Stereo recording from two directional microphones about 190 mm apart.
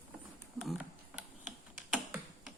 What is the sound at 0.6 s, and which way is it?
Speech, centre (ahead or behind).